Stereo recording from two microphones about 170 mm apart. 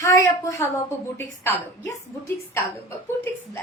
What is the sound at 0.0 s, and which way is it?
A woman's voice, 20° left (ahead or behind).